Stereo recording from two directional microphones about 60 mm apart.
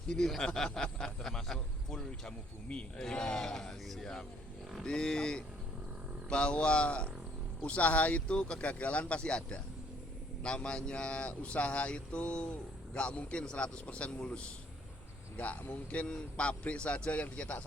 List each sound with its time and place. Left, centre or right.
0.1 s a man's voice: centre; by 17.6 s left